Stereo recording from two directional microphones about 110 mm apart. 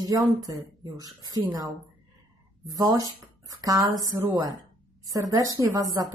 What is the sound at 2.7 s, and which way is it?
A woman's voice, 35° right (ahead or behind).